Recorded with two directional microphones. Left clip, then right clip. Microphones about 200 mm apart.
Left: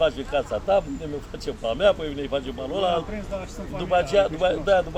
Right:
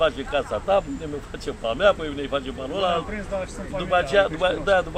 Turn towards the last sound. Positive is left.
turn(degrees=15)  # may be behind; listen again after turning